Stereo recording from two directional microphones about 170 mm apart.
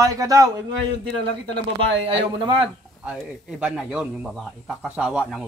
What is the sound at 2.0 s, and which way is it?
Speech, 30° right (ahead or behind).